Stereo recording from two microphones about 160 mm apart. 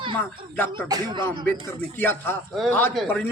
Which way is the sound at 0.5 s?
15° left (ahead or behind).